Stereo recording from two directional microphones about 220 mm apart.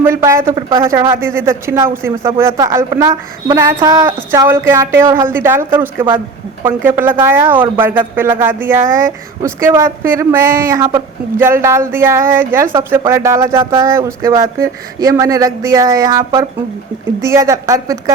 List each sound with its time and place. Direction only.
0.0 s speech: 10° right (ahead or behind)
0.5 s speech: 20° right (ahead or behind)
8.9 s speech: 40° right (ahead or behind)
9.4 s speech: 15° right (ahead or behind)